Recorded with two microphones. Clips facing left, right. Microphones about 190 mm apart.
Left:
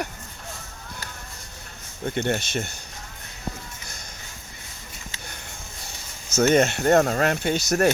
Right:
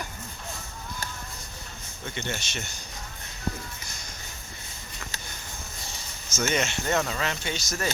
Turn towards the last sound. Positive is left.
turn(degrees=60)  # may be behind; listen again after turning